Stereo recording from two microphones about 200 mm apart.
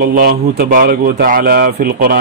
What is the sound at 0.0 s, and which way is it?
Speech, 50° right (ahead or behind).